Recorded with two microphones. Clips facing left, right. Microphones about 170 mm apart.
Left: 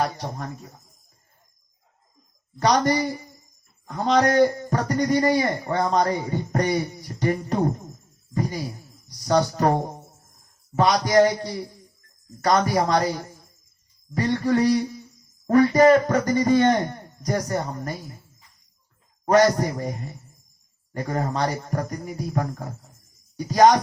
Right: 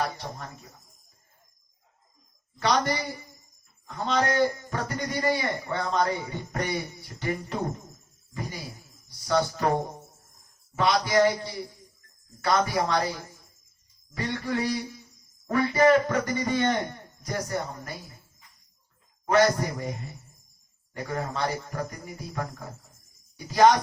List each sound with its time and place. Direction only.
0.0 s a man's voice: 45° left (ahead or behind)
2.6 s a man's voice: 45° left (ahead or behind)
9.0 s speech: 40° left (ahead or behind)
10.8 s speech: 40° left (ahead or behind)
19.2 s speech: 40° left (ahead or behind)
20.9 s a man's voice: 45° left (ahead or behind)